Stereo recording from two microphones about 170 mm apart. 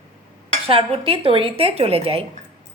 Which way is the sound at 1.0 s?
30° right (ahead or behind).